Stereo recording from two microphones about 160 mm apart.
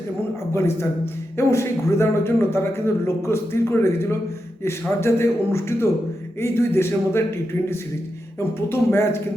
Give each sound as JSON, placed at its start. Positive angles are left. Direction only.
{"t": 0.5, "sound": "a man's voice", "side_deg": 15}